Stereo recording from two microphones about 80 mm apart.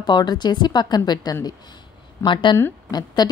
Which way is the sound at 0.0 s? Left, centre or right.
Left.